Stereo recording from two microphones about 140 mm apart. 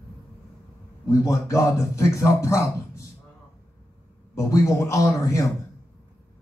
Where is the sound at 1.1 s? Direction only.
20° left (ahead or behind).